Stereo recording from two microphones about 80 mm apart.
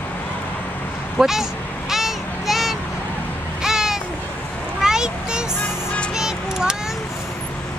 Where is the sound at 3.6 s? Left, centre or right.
Centre.